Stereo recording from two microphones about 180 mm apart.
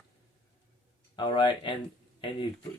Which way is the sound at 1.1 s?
25° left (ahead or behind).